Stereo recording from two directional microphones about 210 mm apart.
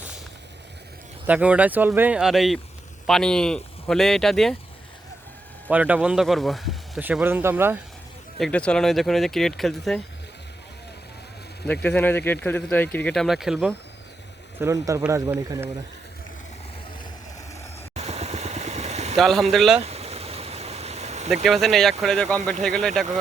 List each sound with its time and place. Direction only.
1.3 s speech: 5° right (ahead or behind)
5.7 s speech: 5° right (ahead or behind)
8.4 s speech: 5° left (ahead or behind)
11.6 s speech: 5° left (ahead or behind)
14.6 s speech: 15° right (ahead or behind)
17.9 s vehicle: 30° right (ahead or behind)
19.1 s speech: centre (ahead or behind)
19.8 s stream: 30° right (ahead or behind)
21.4 s speech: centre (ahead or behind)